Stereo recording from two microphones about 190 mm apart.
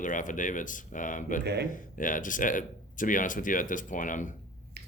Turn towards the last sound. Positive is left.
turn(degrees=-60)  # may be behind; listen again after turning